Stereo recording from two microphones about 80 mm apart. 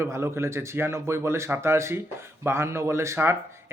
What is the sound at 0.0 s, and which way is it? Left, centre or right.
Speech, right.